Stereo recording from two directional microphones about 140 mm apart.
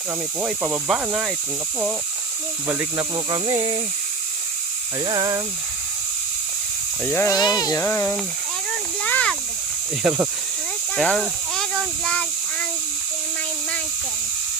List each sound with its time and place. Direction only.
0.4 s speech: 5° right (ahead or behind)
2.6 s speech: 15° right (ahead or behind)
3.2 s speech: 30° right (ahead or behind)
5.0 s speech: 30° right (ahead or behind)
7.0 s speech: 10° left (ahead or behind)
7.3 s speech: 30° left (ahead or behind)
7.9 s speech: 15° left (ahead or behind)
9.0 s a sound: 10° left (ahead or behind)
10.0 s speech: 10° right (ahead or behind)
10.9 s a sound: 5° left (ahead or behind)